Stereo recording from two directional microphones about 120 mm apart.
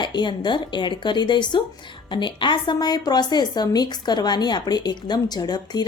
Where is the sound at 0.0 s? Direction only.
40° left (ahead or behind).